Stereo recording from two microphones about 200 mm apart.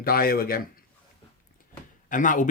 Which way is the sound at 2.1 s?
40° left (ahead or behind).